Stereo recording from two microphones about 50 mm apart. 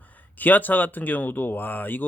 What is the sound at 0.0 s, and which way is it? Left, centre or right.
Speech, left.